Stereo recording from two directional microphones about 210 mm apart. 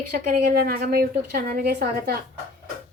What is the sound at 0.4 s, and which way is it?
A woman's voice, 50° right (ahead or behind).